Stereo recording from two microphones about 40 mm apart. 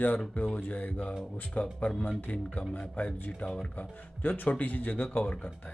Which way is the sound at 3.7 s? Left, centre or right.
Left.